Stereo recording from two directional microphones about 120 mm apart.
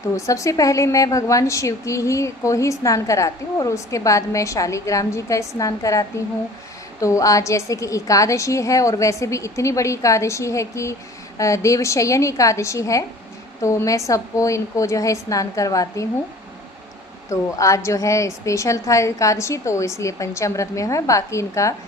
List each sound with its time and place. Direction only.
0.2 s a woman's voice: 25° left (ahead or behind)
17.2 s a woman's voice: 25° left (ahead or behind)